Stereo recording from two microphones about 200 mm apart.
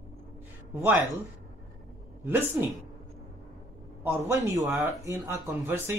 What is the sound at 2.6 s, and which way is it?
Speech, 10° right (ahead or behind).